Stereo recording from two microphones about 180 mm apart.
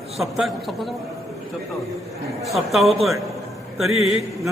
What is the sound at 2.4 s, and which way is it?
A man's voice, centre (ahead or behind).